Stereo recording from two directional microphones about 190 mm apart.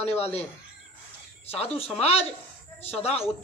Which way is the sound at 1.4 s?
30° left (ahead or behind).